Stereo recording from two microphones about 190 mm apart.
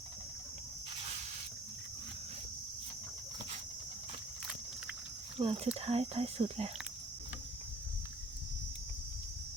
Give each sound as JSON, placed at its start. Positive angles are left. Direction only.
{"t": 5.4, "sound": "speech", "side_deg": -30}